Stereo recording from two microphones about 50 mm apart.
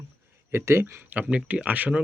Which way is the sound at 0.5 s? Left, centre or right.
Right.